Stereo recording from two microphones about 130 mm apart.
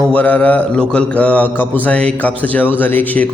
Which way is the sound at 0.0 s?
10° left (ahead or behind).